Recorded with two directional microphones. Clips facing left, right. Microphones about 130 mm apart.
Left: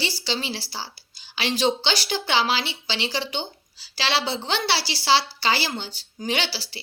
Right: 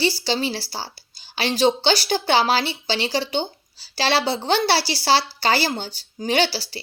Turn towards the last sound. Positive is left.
turn(degrees=-40)  # may be behind; listen again after turning